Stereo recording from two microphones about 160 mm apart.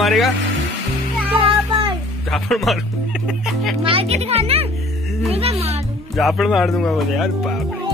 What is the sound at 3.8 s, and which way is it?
Speech, 35° right (ahead or behind).